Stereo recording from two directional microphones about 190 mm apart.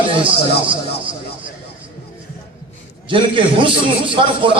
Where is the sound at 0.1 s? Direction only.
25° right (ahead or behind).